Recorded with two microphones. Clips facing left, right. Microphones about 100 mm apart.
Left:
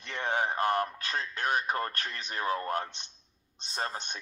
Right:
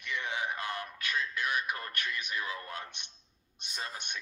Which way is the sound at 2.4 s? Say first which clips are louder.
Left 8 dB; 50° left (ahead or behind).